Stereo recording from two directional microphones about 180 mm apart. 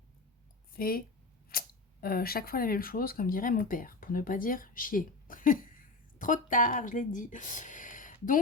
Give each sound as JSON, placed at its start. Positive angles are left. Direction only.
{"t": 0.7, "sound": "speech", "side_deg": 55}